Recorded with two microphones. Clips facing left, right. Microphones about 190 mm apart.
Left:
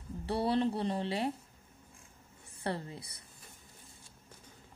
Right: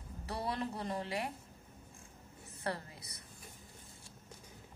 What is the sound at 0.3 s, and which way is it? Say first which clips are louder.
Speech: left 8 dB; 30° left (ahead or behind).